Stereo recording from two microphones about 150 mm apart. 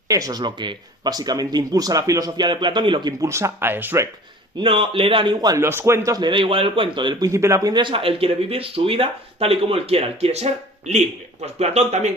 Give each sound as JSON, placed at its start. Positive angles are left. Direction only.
{"t": 0.1, "sound": "speech", "side_deg": -25}
{"t": 4.5, "sound": "speech", "side_deg": -35}